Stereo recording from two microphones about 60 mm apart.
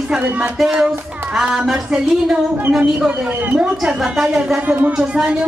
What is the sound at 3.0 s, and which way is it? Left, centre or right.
Speech, centre.